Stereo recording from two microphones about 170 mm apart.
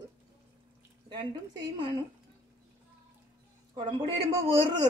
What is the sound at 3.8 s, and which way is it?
Speech, 30° right (ahead or behind).